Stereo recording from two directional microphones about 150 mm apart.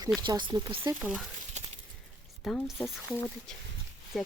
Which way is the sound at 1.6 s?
50° right (ahead or behind).